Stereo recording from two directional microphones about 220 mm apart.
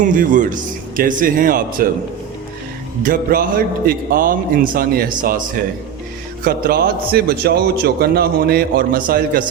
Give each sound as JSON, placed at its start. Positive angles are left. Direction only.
{"t": 0.0, "sound": "a man's voice", "side_deg": -35}
{"t": 3.0, "sound": "a man's voice", "side_deg": -40}